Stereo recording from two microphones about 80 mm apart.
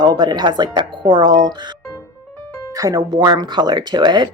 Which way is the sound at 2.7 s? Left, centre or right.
Right.